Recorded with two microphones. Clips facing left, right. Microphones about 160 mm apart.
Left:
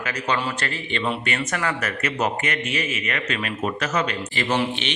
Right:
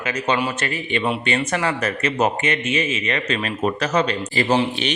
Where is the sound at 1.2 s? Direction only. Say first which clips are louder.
Right 4 dB; 25° right (ahead or behind).